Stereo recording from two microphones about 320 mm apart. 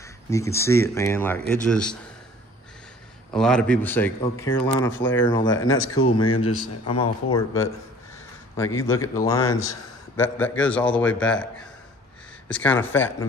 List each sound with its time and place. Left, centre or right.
0.0 s speech: centre
3.3 s a man's voice: centre
5.5 s speech: left
6.9 s speech: centre
8.5 s a man's voice: centre
12.4 s a man's voice: centre